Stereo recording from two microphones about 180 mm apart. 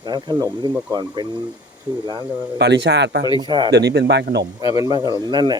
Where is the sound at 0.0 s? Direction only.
25° right (ahead or behind).